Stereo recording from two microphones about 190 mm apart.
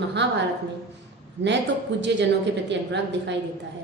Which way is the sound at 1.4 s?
70° right (ahead or behind).